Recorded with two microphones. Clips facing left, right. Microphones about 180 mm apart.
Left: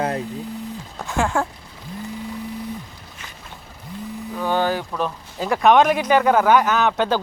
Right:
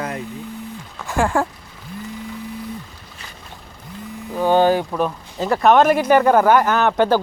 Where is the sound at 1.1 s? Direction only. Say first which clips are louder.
Right 3 dB; centre (ahead or behind).